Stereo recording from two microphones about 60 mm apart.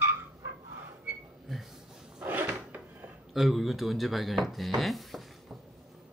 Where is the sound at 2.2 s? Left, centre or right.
Right.